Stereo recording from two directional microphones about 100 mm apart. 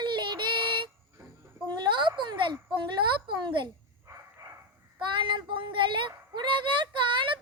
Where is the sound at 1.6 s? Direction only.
50° right (ahead or behind).